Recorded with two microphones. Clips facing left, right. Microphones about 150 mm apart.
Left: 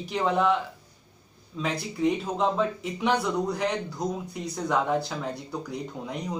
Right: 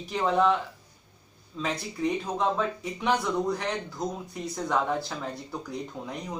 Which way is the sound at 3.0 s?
Centre (ahead or behind).